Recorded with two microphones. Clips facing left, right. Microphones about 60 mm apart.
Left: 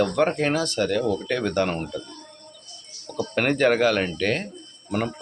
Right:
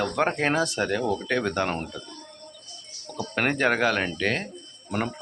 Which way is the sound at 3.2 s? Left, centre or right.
Centre.